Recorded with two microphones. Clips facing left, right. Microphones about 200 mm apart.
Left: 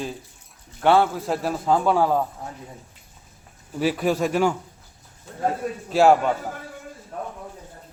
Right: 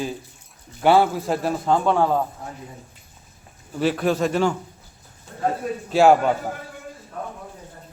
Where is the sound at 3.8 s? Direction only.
10° left (ahead or behind).